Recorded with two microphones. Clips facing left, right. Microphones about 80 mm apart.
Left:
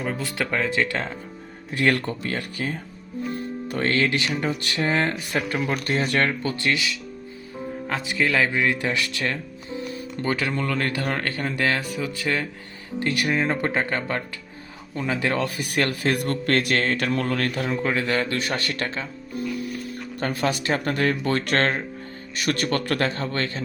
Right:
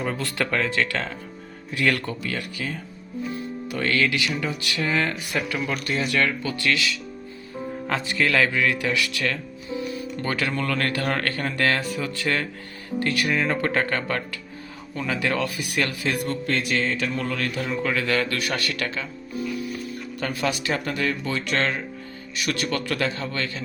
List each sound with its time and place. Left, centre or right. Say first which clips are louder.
0.0 s speech: right 1 dB; centre
1.7 s speech: left 2 dB; left
6.7 s speech: right 1 dB; left
7.9 s speech: right 2 dB; centre
8.2 s speech: even; centre
13.0 s speech: even; left
17.2 s speech: left 2 dB; left
17.8 s speech: right 1 dB; left
19.3 s music: even; centre
20.1 s speech: left 2 dB; left